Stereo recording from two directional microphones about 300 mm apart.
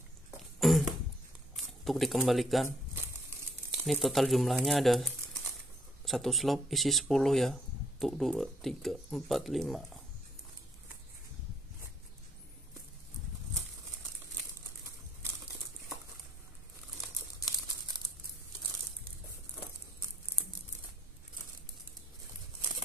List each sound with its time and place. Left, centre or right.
0.6 s a sound: centre
1.6 s speech: centre
6.0 s speech: centre